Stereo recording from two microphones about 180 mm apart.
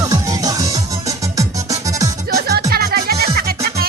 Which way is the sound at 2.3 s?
60° right (ahead or behind).